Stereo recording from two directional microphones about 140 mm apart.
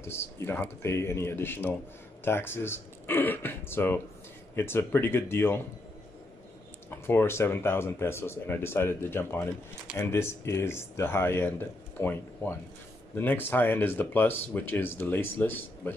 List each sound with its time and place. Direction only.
0.0 s speech: 15° left (ahead or behind)
6.9 s speech: 15° left (ahead or behind)